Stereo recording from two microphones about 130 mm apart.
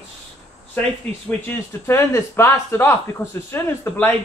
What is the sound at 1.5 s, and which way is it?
A man's voice, 20° left (ahead or behind).